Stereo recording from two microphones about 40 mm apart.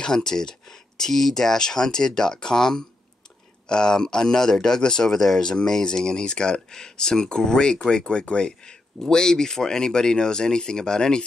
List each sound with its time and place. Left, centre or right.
0.0 s speech: centre